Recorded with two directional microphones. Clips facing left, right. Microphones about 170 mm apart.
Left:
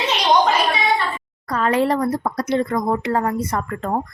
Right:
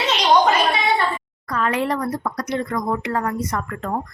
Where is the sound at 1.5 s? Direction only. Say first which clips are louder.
Left 3 dB; 35° left (ahead or behind).